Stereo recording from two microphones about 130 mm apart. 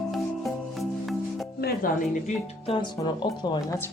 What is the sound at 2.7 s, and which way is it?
Speech, 35° left (ahead or behind).